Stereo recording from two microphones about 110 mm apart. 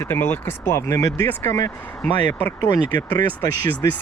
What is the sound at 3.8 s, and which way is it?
Speech, 35° left (ahead or behind).